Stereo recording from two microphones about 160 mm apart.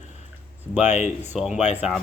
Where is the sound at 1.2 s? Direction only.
10° right (ahead or behind).